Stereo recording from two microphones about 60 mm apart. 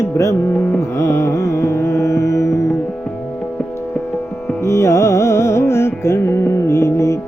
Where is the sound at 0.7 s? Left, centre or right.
Left.